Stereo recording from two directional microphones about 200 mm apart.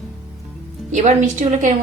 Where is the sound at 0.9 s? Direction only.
35° right (ahead or behind).